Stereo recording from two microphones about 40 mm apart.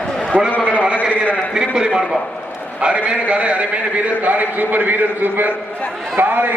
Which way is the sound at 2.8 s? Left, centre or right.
Right.